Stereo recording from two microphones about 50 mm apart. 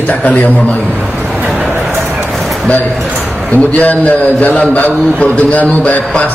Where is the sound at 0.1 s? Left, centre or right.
Left.